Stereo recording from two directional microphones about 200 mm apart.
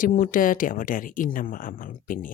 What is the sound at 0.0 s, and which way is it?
Speech, 45° left (ahead or behind).